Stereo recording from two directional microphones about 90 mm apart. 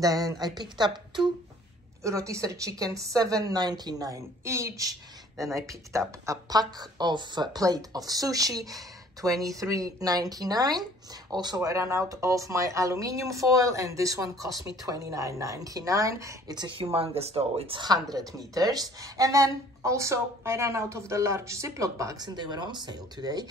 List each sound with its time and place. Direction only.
0.0 s speech: 40° right (ahead or behind)
0.6 s speech: 55° right (ahead or behind)
2.0 s a woman's voice: 35° right (ahead or behind)
16.5 s speech: 65° right (ahead or behind); by 17.8 s 85° right
18.1 s speech: 45° right (ahead or behind)
22.2 s speech: 50° right (ahead or behind)